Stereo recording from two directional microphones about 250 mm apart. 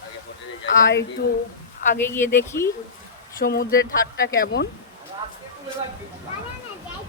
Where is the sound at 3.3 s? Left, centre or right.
Left.